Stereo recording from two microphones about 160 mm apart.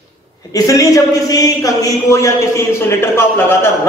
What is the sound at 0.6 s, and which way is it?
A man's voice, 20° left (ahead or behind).